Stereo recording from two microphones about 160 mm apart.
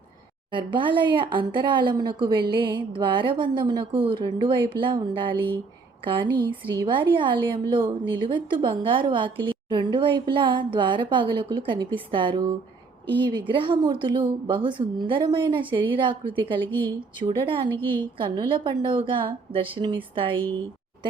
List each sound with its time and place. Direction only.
0.5 s speech: 30° right (ahead or behind)
13.5 s a woman's voice: 30° right (ahead or behind)